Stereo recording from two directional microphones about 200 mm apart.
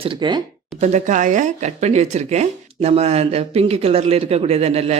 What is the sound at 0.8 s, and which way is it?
Speech, 35° right (ahead or behind).